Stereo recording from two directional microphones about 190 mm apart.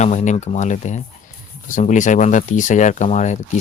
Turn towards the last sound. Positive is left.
turn(degrees=40)  # may be behind; listen again after turning